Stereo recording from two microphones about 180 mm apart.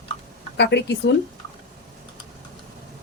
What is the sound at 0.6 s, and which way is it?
Speech, 70° left (ahead or behind).